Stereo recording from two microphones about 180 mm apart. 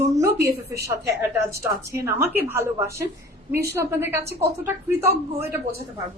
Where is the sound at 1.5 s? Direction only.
15° right (ahead or behind).